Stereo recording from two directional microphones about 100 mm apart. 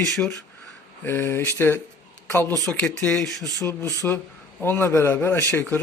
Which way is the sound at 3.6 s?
30° left (ahead or behind).